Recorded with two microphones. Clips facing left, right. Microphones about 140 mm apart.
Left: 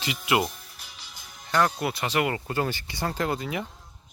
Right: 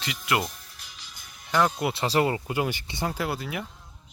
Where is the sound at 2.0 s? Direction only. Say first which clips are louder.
Right 3 dB; 35° right (ahead or behind).